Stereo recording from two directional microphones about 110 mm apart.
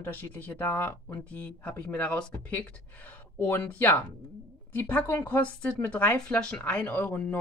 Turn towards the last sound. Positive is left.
turn(degrees=15)  # may be behind; listen again after turning